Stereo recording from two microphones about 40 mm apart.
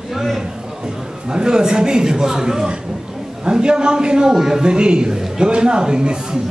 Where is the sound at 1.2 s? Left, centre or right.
Centre.